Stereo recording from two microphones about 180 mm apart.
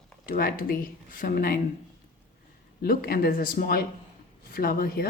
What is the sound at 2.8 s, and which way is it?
Speech, 55° left (ahead or behind).